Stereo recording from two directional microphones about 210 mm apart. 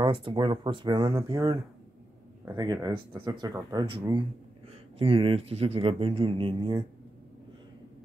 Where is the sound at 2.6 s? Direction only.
20° right (ahead or behind).